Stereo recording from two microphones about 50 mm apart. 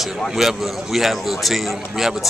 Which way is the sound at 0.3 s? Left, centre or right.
Centre.